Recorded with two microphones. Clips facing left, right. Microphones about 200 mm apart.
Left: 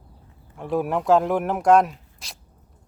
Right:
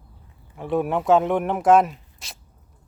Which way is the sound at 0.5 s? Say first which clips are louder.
Right 1 dB; centre (ahead or behind).